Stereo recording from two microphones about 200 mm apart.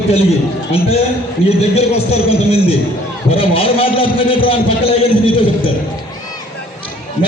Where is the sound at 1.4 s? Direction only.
30° left (ahead or behind).